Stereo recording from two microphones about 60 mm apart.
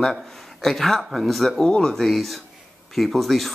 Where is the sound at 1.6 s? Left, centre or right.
Centre.